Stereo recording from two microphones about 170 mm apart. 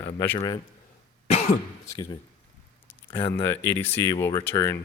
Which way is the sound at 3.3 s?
10° left (ahead or behind).